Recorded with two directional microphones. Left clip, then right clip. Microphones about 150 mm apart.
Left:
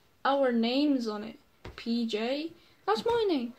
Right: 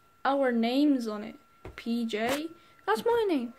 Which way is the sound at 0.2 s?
30° right (ahead or behind).